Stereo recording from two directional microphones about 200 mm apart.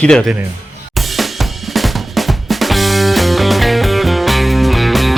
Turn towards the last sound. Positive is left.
turn(degrees=0)  # may be behind; listen again after turning